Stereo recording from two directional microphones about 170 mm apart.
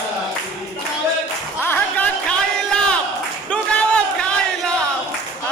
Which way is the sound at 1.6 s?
10° left (ahead or behind).